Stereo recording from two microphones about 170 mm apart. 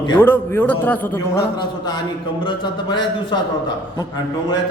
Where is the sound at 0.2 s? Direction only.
10° left (ahead or behind).